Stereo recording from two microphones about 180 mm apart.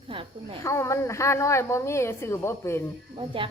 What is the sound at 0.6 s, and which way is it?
Speech, 15° left (ahead or behind).